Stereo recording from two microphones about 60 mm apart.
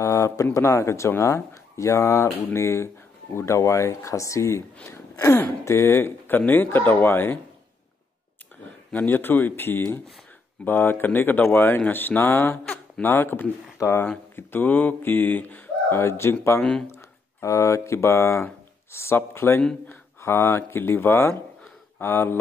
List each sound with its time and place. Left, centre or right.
0.0 s speech: left
4.8 s a sound: left
5.7 s speech: left
8.9 s speech: left
15.9 s speech: left
16.9 s speech: left